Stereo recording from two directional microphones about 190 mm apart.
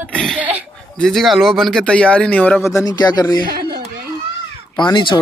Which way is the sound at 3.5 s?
55° right (ahead or behind).